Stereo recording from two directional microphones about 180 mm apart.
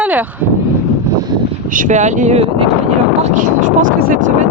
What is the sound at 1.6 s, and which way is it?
Speech, 50° right (ahead or behind).